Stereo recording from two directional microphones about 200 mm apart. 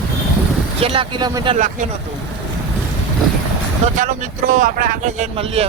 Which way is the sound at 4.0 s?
40° right (ahead or behind).